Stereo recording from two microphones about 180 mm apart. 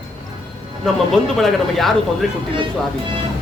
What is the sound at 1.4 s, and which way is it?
Speech, centre (ahead or behind).